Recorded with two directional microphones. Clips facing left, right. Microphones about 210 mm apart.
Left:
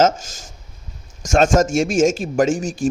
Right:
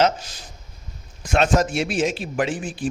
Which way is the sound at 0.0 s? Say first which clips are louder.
Left 3 dB; 45° left (ahead or behind).